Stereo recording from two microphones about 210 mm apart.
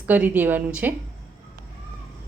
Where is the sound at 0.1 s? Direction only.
10° right (ahead or behind).